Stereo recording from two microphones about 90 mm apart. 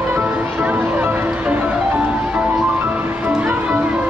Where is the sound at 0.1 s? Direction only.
15° right (ahead or behind).